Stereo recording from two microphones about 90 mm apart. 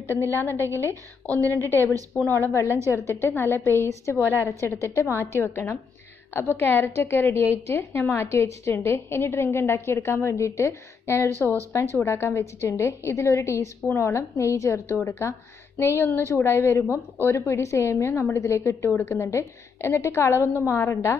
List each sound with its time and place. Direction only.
0.3 s a woman's voice: 25° left (ahead or behind)